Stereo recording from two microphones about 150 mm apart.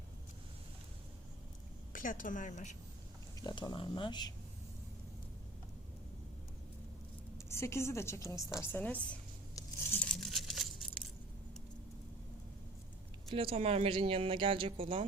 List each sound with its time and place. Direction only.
1.9 s speech: 60° left (ahead or behind)
3.4 s speech: 25° left (ahead or behind)
7.3 s a woman's voice: 20° left (ahead or behind)
9.6 s tearing: 15° left (ahead or behind)
10.2 s a sound: centre (ahead or behind)
13.3 s speech: 40° right (ahead or behind)